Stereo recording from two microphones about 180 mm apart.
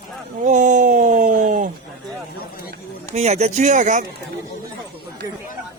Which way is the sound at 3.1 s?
35° right (ahead or behind).